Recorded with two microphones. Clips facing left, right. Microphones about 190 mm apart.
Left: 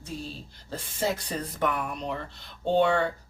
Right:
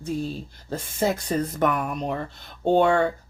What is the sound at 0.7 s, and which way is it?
Speech, 45° right (ahead or behind).